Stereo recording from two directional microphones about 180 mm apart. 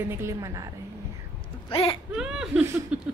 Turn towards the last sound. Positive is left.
turn(degrees=-5)  # may be behind; listen again after turning